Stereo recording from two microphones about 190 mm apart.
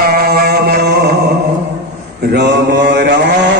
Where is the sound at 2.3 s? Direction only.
65° right (ahead or behind).